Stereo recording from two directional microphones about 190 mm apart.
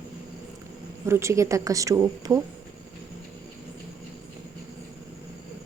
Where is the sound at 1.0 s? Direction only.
15° right (ahead or behind).